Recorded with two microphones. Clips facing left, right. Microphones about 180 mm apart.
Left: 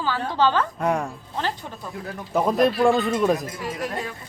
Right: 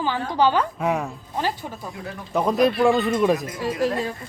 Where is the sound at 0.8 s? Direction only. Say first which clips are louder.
Even; 5° right (ahead or behind).